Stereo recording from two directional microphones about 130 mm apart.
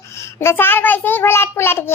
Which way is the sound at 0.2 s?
20° left (ahead or behind).